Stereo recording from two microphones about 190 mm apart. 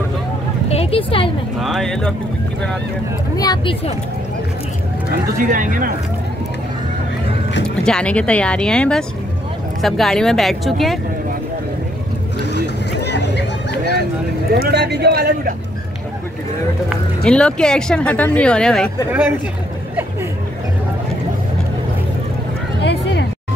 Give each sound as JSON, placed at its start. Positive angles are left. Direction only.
{"t": 0.7, "sound": "speech", "side_deg": 30}
{"t": 1.6, "sound": "speech", "side_deg": 0}
{"t": 3.3, "sound": "speech", "side_deg": 20}
{"t": 5.4, "sound": "speech", "side_deg": -45}
{"t": 7.6, "sound": "speech", "side_deg": 5}
{"t": 12.4, "sound": "a sound", "side_deg": 65}
{"t": 14.5, "sound": "speech", "side_deg": -60}
{"t": 17.2, "sound": "speech", "side_deg": 5}